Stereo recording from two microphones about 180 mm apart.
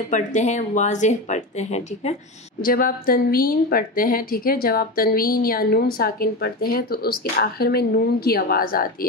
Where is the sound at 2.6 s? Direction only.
55° left (ahead or behind).